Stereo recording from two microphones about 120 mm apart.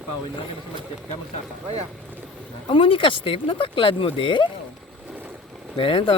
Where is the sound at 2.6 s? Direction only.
45° left (ahead or behind).